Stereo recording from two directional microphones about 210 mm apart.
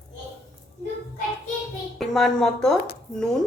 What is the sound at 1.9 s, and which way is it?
Speech, centre (ahead or behind).